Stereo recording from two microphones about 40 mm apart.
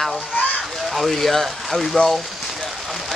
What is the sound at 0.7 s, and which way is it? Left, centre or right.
Speech, centre.